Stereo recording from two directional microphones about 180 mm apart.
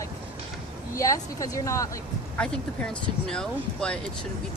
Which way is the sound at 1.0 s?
20° left (ahead or behind).